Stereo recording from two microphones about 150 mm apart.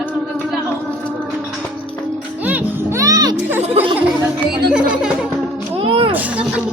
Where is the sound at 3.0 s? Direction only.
25° right (ahead or behind).